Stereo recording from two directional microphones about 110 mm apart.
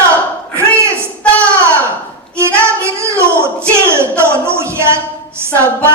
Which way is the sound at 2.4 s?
25° right (ahead or behind).